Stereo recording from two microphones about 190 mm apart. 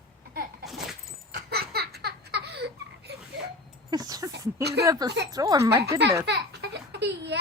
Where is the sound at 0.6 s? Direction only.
Centre (ahead or behind).